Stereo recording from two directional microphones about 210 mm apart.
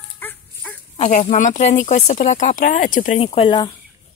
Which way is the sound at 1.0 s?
35° left (ahead or behind).